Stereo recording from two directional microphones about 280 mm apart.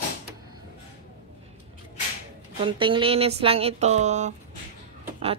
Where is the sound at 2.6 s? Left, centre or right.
Centre.